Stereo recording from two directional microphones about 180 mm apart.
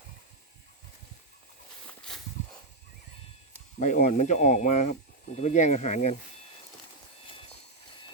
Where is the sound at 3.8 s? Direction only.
45° left (ahead or behind).